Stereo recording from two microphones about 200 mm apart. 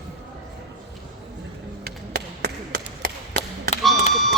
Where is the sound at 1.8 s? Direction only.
55° right (ahead or behind).